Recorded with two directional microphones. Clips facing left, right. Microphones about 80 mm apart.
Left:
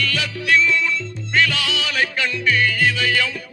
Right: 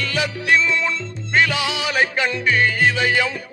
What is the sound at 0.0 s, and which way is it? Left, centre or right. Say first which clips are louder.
Music: right 1 dB; right.